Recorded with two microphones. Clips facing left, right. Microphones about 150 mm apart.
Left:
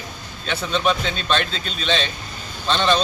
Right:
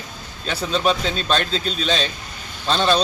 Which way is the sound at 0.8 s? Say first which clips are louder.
Right 1 dB; 35° right (ahead or behind).